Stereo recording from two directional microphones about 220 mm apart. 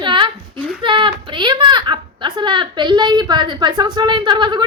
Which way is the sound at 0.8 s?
20° right (ahead or behind).